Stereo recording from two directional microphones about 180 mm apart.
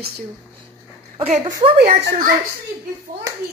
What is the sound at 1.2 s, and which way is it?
Speech, 35° right (ahead or behind).